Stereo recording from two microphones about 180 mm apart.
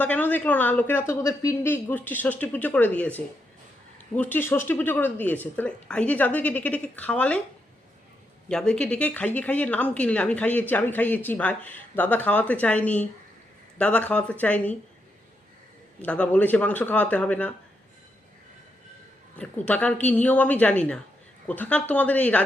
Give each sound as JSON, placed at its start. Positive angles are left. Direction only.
{"t": 0.0, "sound": "speech", "side_deg": 10}
{"t": 8.4, "sound": "speech", "side_deg": 5}
{"t": 16.0, "sound": "speech", "side_deg": 5}
{"t": 19.4, "sound": "speech", "side_deg": 10}